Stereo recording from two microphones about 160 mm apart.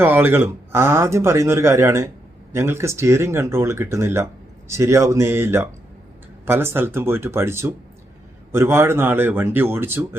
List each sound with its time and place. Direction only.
0.0 s speech: 15° right (ahead or behind)